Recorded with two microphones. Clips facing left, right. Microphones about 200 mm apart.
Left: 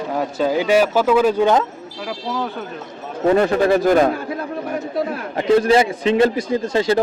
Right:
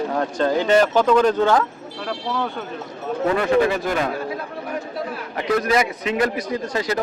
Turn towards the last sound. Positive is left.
turn(degrees=30)  # may be behind; listen again after turning